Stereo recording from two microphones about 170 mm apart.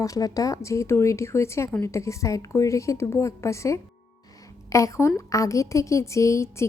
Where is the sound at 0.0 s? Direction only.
20° left (ahead or behind).